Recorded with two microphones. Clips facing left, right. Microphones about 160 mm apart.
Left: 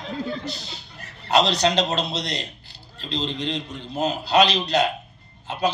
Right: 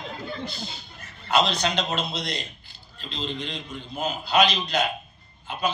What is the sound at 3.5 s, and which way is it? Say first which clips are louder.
Speech: left 5 dB; 90° left.